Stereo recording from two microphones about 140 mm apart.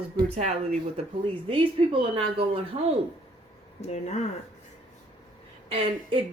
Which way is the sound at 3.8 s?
50° left (ahead or behind).